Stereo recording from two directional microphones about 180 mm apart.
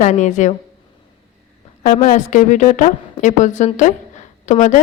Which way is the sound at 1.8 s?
45° left (ahead or behind).